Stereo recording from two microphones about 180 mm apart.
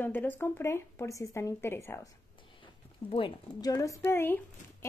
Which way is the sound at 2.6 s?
30° left (ahead or behind).